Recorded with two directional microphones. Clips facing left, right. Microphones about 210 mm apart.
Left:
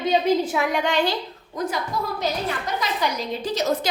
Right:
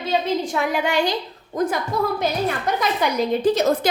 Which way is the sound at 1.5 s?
55° right (ahead or behind).